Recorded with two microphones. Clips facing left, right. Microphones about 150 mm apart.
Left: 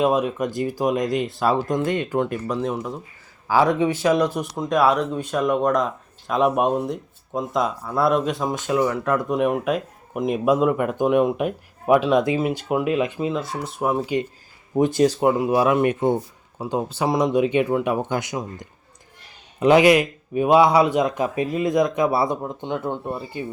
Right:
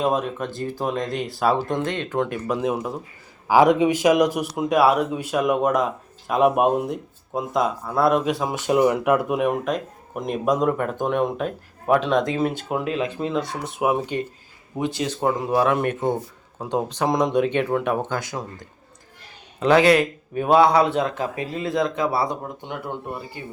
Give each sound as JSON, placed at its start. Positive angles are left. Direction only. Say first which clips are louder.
{"t": 0.0, "sound": "speech", "louder": "left 3 dB", "side_deg": 5}
{"t": 1.8, "sound": "speech", "louder": "left 2 dB", "side_deg": 10}
{"t": 2.6, "sound": "speech", "louder": "right 1 dB", "side_deg": -10}
{"t": 14.8, "sound": "speech", "louder": "left 8 dB", "side_deg": 45}
{"t": 15.2, "sound": "speech", "louder": "left 2 dB", "side_deg": 10}